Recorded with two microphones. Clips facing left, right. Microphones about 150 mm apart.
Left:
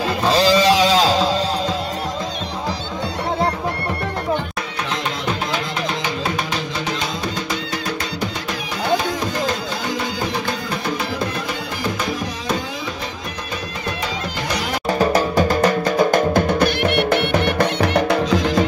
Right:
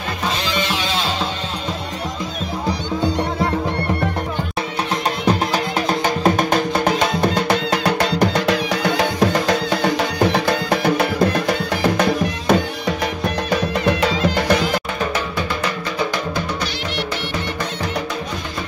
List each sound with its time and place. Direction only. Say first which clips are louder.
0.3 s music: left 10 dB; 35° left (ahead or behind)
1.0 s music: left 6 dB; 90° left
6.2 s music: right 7 dB; 50° right (ahead or behind); by 11.1 s 70° right (ahead or behind)
13.8 s music: right 7 dB; 75° right (ahead or behind)
15.0 s music: left 6 dB; 40° left (ahead or behind); by 18.4 s 65° left (ahead or behind)